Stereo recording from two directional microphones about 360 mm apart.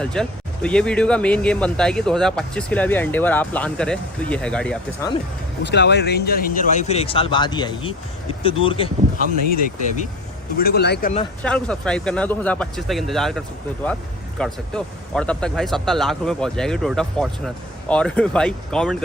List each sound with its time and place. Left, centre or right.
0.0 s speech: centre
5.6 s speech: left
10.6 s speech: left
11.4 s speech: centre